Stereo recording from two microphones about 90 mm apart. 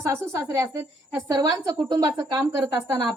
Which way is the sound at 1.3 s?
45° right (ahead or behind).